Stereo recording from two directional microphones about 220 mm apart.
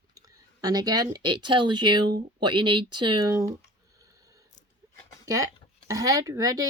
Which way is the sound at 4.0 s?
15° right (ahead or behind).